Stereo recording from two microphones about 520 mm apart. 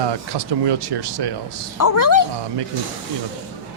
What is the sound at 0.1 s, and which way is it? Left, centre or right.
Speech, right.